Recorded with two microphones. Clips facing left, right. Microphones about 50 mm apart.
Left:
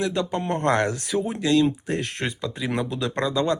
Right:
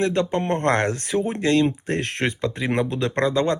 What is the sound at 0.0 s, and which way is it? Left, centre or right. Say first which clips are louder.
Speech: right 3 dB; right.